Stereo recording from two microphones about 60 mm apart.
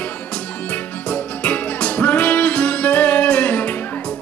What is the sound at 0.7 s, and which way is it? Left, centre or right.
Music, left.